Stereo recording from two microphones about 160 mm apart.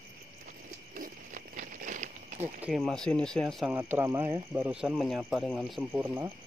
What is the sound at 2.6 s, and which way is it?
Speech, centre (ahead or behind).